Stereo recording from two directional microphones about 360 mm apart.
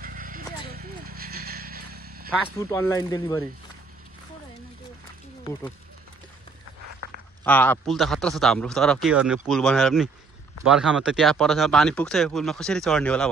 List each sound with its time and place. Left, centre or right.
0.0 s vehicle: right
2.7 s speech: centre
7.4 s speech: centre